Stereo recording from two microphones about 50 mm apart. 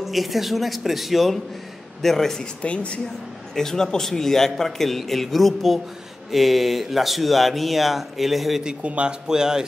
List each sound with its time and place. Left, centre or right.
0.0 s speech: centre
2.6 s speech: left
3.5 s a man's voice: centre
8.6 s speech: right